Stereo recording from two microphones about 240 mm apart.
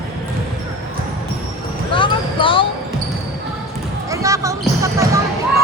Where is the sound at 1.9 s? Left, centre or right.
Left.